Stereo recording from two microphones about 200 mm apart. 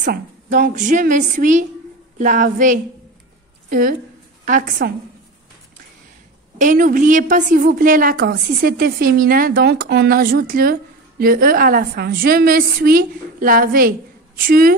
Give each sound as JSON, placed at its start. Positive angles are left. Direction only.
{"t": 0.0, "sound": "a woman's voice", "side_deg": -40}
{"t": 4.5, "sound": "a woman's voice", "side_deg": -45}
{"t": 6.6, "sound": "a woman's voice", "side_deg": -40}